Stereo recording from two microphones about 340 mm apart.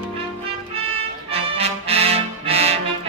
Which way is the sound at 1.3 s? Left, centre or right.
Centre.